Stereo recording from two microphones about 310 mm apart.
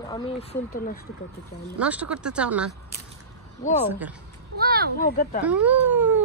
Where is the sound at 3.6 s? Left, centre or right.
Left.